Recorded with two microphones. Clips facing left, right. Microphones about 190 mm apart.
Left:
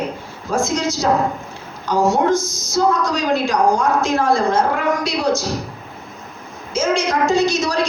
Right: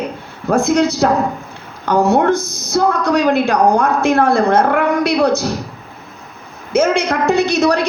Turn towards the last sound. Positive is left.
turn(degrees=-60)  # may be behind; listen again after turning